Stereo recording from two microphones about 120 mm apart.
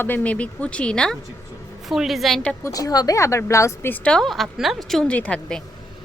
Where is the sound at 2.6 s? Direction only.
30° left (ahead or behind); by 5.6 s 10° left (ahead or behind).